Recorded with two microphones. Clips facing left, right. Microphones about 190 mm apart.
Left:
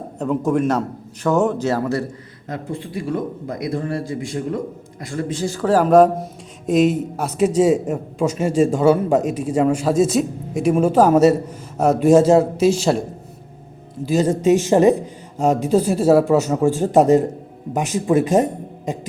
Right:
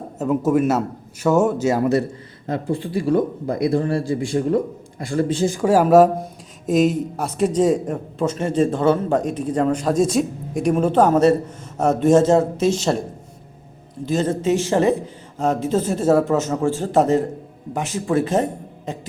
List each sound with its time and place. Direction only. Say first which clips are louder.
0.2 s a man's voice: right 1 dB; 5° right (ahead or behind)
2.5 s a man's voice: right 5 dB; 35° right (ahead or behind)
5.5 s a man's voice: left 1 dB; 10° right (ahead or behind); by 13.0 s 5° left (ahead or behind)
14.0 s a man's voice: left 3 dB; 10° left (ahead or behind)